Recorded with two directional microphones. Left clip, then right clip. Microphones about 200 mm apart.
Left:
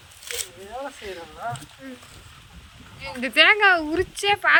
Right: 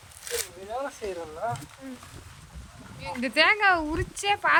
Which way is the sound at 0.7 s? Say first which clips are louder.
Right 2 dB; 50° right (ahead or behind).